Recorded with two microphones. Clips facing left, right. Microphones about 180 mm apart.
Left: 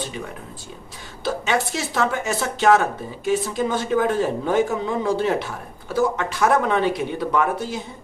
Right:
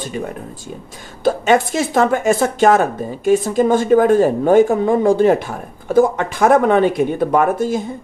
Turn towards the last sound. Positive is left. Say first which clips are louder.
# right 7 dB
turn(degrees=-45)  # may be behind; listen again after turning